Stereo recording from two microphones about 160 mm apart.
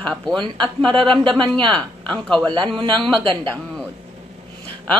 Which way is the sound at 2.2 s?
5° left (ahead or behind).